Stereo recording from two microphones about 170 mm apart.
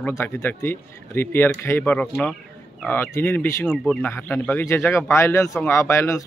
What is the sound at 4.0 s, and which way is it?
Speech, 10° left (ahead or behind).